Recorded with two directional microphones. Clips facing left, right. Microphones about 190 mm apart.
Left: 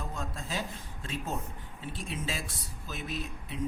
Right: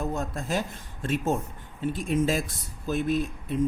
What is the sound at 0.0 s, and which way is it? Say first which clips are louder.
Speech: right 9 dB; 45° right (ahead or behind).